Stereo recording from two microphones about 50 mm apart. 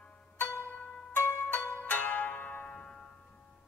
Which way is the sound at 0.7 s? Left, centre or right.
Left.